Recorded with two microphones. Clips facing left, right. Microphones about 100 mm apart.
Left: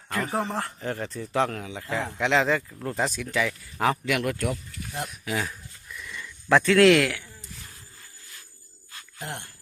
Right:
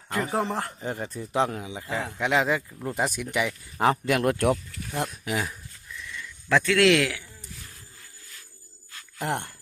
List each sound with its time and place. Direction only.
0.1 s speech: 20° right (ahead or behind); by 4.4 s 35° right (ahead or behind)
4.4 s speech: 55° right (ahead or behind)
5.2 s speech: 15° right (ahead or behind)
6.0 s a sound: 15° left (ahead or behind)
6.5 s speech: 10° left (ahead or behind)
6.8 s speech: centre (ahead or behind)
9.1 s speech: 60° right (ahead or behind)